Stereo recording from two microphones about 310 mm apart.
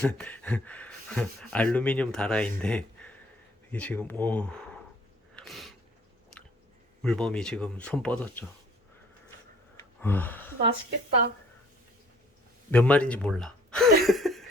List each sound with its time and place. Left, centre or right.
0.0 s speech: centre
5.4 s a sound: centre
7.0 s speech: centre
9.7 s gasp: centre
12.7 s speech: centre